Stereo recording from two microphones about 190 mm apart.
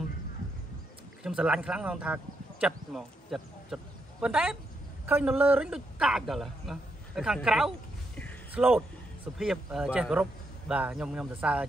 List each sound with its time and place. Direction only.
1.2 s a man's voice: 5° right (ahead or behind)